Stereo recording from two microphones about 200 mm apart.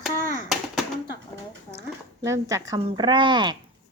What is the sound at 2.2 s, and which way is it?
A woman's voice, 15° right (ahead or behind).